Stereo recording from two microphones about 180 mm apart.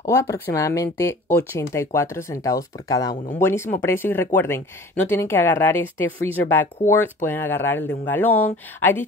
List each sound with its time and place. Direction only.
0.0 s speech: 15° left (ahead or behind)